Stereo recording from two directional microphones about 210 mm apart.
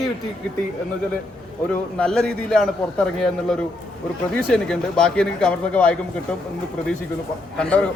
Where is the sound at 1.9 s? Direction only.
5° left (ahead or behind).